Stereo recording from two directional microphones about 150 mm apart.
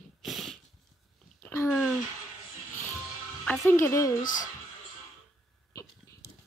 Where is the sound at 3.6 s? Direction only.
20° left (ahead or behind).